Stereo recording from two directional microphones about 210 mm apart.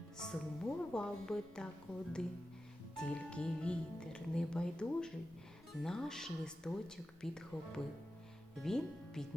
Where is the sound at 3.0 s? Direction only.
5° left (ahead or behind).